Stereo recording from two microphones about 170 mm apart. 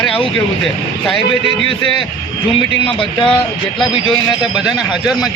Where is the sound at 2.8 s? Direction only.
30° left (ahead or behind).